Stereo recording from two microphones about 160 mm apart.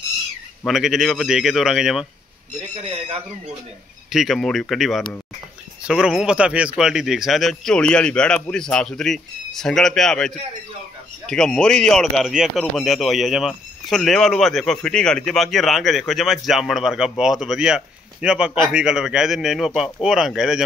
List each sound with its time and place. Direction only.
0.7 s speech: centre (ahead or behind)
2.7 s speech: 35° right (ahead or behind)
4.1 s speech: centre (ahead or behind)